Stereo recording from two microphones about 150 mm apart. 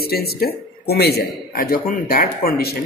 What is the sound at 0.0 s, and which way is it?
A man's voice, 90° left.